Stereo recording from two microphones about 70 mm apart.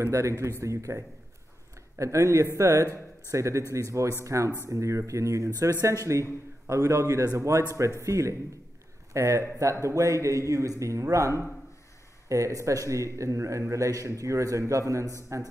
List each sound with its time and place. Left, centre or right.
0.0 s a man's voice: right